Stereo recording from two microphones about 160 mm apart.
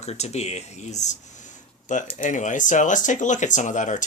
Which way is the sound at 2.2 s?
50° left (ahead or behind).